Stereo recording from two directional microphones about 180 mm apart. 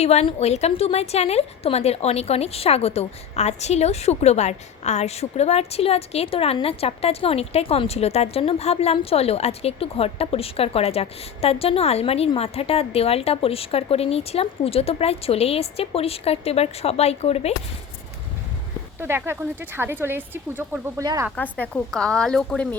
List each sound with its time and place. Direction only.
0.0 s a woman's voice: 35° left (ahead or behind)
18.9 s speech: 15° right (ahead or behind)
21.3 s speech: 10° left (ahead or behind)